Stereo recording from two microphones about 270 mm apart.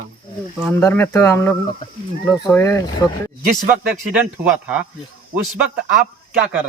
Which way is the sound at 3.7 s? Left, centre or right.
Centre.